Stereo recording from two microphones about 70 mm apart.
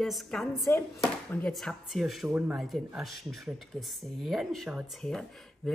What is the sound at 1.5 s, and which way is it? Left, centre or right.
Speech, centre.